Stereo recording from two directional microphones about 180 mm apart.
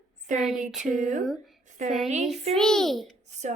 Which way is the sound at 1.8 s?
40° right (ahead or behind).